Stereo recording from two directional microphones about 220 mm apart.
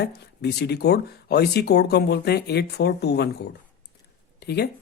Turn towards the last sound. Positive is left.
turn(degrees=50)  # may be behind; listen again after turning